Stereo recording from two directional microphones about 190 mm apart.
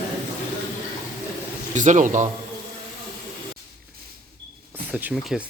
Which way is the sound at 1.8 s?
40° right (ahead or behind).